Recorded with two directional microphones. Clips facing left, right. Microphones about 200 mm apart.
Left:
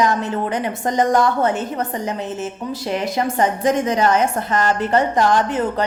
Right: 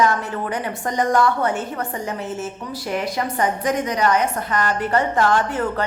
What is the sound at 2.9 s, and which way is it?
A woman's voice, 25° left (ahead or behind).